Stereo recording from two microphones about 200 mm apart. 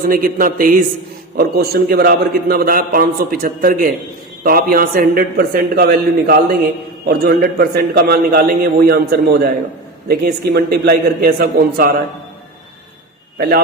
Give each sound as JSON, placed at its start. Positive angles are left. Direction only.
{"t": 0.0, "sound": "a man's voice", "side_deg": -45}